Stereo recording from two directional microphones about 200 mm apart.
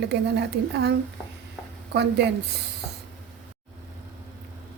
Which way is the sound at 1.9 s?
55° right (ahead or behind).